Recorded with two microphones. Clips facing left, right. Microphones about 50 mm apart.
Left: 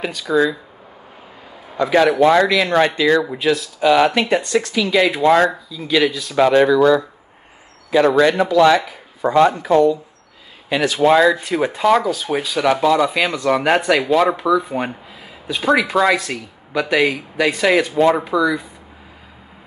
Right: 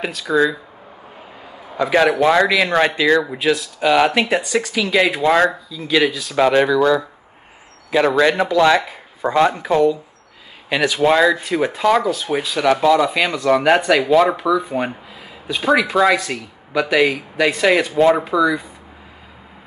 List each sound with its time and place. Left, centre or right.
0.0 s speech: centre
1.8 s speech: centre
8.4 s speech: centre
9.2 s speech: centre
10.8 s speech: centre